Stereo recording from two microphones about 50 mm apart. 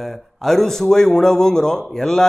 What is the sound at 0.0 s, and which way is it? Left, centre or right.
A man's voice, centre.